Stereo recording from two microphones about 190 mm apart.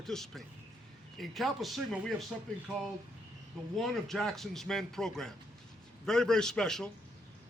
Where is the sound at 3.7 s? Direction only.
Centre (ahead or behind).